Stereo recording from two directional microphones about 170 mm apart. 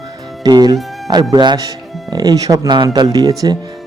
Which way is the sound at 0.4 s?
25° right (ahead or behind).